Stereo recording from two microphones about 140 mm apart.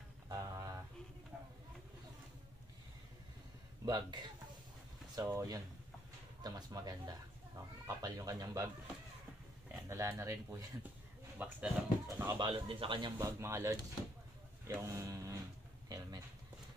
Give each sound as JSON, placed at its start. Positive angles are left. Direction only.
{"t": 0.3, "sound": "a sound", "side_deg": -25}
{"t": 1.3, "sound": "a sound", "side_deg": -10}
{"t": 3.8, "sound": "speech", "side_deg": -30}
{"t": 9.7, "sound": "speech", "side_deg": -20}
{"t": 12.4, "sound": "speech", "side_deg": -35}
{"t": 13.2, "sound": "speech", "side_deg": -20}